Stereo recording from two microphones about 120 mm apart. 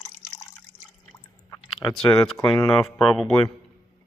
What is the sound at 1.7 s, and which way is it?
Speech, centre (ahead or behind).